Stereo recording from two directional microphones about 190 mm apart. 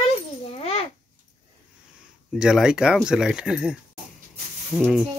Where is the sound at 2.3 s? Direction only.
5° right (ahead or behind).